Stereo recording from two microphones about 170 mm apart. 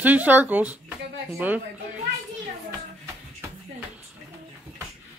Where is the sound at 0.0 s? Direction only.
10° right (ahead or behind).